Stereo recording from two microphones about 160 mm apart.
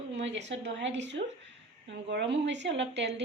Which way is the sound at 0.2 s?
90° right.